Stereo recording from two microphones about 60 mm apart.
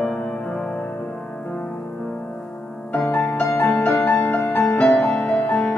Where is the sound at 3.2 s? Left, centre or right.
Left.